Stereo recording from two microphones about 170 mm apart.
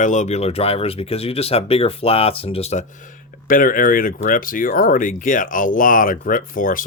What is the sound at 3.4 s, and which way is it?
Speech, 55° left (ahead or behind).